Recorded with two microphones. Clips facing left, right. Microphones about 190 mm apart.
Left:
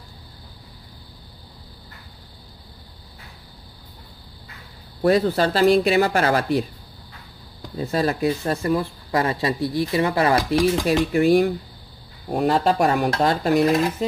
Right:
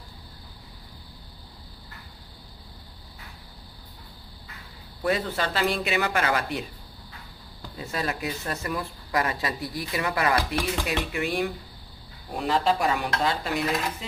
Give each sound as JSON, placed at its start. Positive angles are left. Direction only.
{"t": 5.0, "sound": "speech", "side_deg": 35}
{"t": 7.8, "sound": "speech", "side_deg": 35}
{"t": 12.3, "sound": "speech", "side_deg": 45}